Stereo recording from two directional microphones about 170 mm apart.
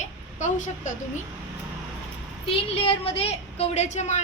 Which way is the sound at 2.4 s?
35° left (ahead or behind).